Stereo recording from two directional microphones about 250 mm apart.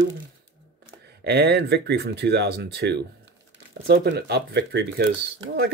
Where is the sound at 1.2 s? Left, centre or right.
Right.